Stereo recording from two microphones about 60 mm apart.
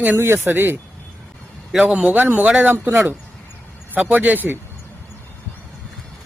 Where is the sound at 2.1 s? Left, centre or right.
Right.